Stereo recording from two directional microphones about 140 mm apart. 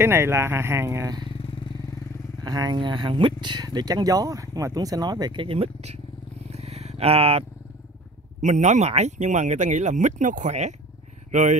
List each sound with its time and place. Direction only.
0.0 s speech: 20° right (ahead or behind)
2.4 s speech: 30° right (ahead or behind); by 5.9 s 50° right (ahead or behind)
6.5 s vehicle: 50° right (ahead or behind)
8.4 s speech: 55° right (ahead or behind)